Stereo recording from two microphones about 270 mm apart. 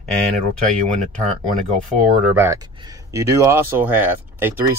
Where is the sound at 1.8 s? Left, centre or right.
Centre.